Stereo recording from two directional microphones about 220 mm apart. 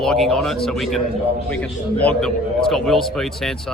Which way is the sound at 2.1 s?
Centre (ahead or behind).